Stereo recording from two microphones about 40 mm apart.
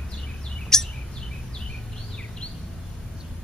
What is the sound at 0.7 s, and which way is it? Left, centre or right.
Bird vocalization, centre.